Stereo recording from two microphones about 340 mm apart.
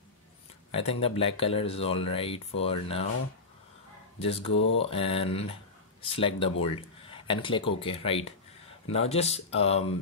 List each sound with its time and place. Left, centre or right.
0.7 s speech: centre
4.2 s speech: centre
4.5 s mantra: left
4.8 s speech: centre